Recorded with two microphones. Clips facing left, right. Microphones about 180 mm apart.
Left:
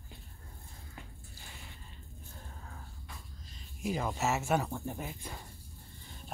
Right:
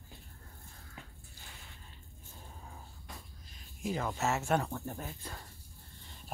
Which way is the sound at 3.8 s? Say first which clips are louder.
Left 1 dB; 10° left (ahead or behind).